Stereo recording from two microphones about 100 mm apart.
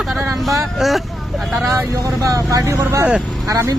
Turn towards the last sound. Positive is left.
turn(degrees=-30)  # may be behind; listen again after turning